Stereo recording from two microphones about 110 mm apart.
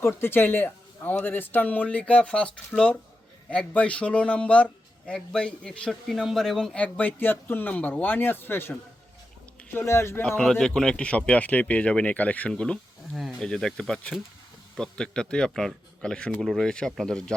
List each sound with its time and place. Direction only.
0.0 s a man's voice: 20° left (ahead or behind)
9.7 s speech: 25° left (ahead or behind)
10.2 s a man's voice: 5° left (ahead or behind)